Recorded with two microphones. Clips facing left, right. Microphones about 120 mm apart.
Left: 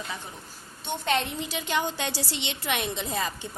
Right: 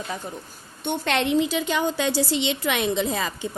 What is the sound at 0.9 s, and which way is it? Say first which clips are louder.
Speech: right 5 dB; 75° right (ahead or behind).